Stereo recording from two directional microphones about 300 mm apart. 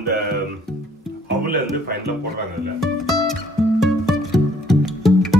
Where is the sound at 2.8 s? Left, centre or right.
Centre.